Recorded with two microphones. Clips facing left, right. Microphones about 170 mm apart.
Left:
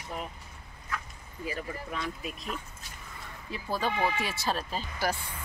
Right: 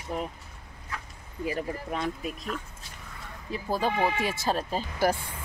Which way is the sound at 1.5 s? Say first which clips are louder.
Right 4 dB; 50° right (ahead or behind).